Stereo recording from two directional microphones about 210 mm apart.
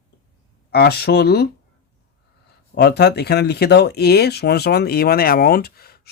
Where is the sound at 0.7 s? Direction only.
50° left (ahead or behind).